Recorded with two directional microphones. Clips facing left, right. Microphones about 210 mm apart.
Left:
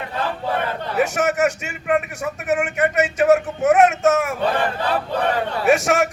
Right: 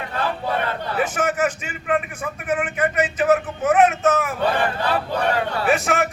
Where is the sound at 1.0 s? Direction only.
75° left (ahead or behind).